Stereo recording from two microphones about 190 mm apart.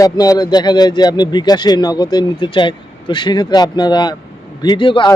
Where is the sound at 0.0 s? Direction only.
20° left (ahead or behind).